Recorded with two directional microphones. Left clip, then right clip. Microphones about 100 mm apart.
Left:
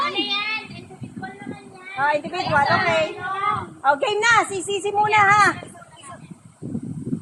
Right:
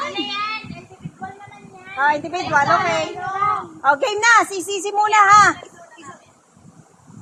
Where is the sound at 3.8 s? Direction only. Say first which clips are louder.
Right 2 dB; 45° right (ahead or behind).